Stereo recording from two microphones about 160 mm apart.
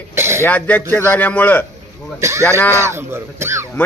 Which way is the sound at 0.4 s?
10° left (ahead or behind).